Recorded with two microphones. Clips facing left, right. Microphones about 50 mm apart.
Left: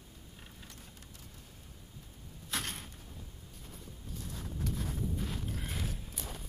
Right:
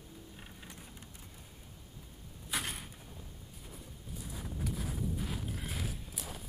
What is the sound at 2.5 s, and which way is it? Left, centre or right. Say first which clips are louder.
Door: right 1 dB; centre.